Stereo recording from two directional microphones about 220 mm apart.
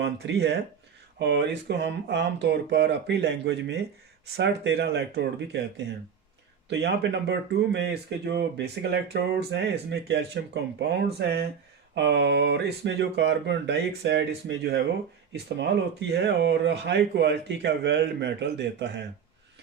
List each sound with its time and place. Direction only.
0.0 s speech: 50° right (ahead or behind)